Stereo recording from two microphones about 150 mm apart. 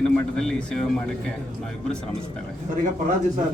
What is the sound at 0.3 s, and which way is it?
Speech, 5° left (ahead or behind).